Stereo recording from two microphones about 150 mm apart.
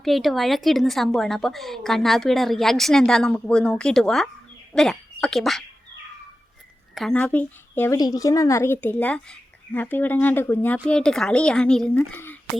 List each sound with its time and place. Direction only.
0.0 s a woman's voice: centre (ahead or behind)
6.9 s speech: centre (ahead or behind)
7.2 s speech: 10° left (ahead or behind)